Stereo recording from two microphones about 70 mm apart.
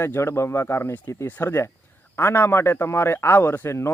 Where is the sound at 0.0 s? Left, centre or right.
Left.